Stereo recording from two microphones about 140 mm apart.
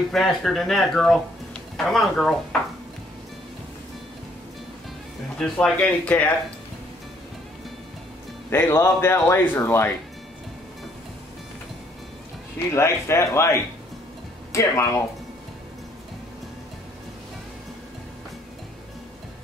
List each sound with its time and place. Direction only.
0.1 s speech: centre (ahead or behind)
5.4 s speech: 10° left (ahead or behind)
8.5 s speech: 15° left (ahead or behind)
12.7 s speech: 20° left (ahead or behind)